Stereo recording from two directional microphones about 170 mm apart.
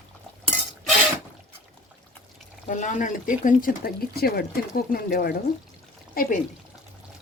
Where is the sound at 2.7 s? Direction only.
50° left (ahead or behind).